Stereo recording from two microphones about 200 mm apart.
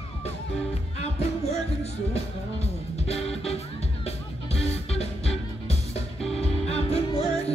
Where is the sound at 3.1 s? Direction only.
30° left (ahead or behind).